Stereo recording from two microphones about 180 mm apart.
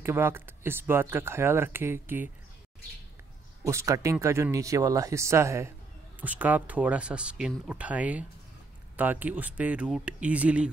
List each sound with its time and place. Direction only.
0.0 s speech: 15° right (ahead or behind)
3.6 s speech: 15° right (ahead or behind)